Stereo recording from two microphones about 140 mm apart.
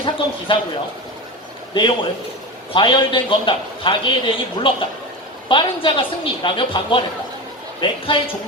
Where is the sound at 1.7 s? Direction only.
35° left (ahead or behind).